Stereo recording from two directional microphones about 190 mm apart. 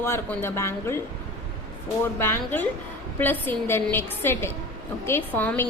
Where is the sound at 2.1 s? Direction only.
10° left (ahead or behind).